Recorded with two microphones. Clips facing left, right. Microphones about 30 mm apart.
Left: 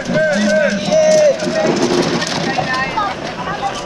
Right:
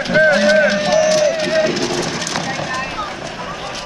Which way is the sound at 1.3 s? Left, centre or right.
Right.